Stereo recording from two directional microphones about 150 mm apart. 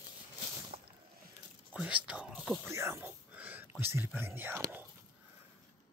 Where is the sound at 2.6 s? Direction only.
15° right (ahead or behind).